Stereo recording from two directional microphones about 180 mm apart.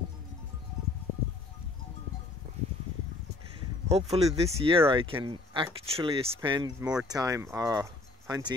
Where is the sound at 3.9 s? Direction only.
35° right (ahead or behind).